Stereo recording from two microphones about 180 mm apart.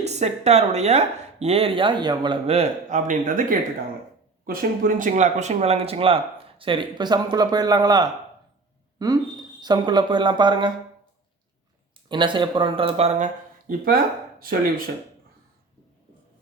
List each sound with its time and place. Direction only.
0.0 s speech: 40° right (ahead or behind)
12.0 s speech: 25° right (ahead or behind); by 14.8 s 55° right (ahead or behind)